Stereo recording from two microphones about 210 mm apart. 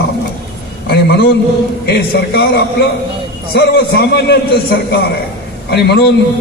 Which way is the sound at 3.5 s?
50° left (ahead or behind).